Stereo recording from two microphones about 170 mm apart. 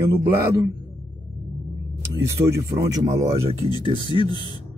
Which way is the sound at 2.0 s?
15° right (ahead or behind).